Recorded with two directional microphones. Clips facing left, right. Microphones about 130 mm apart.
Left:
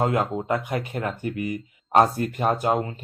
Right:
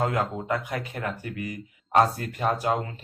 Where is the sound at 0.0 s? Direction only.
25° left (ahead or behind).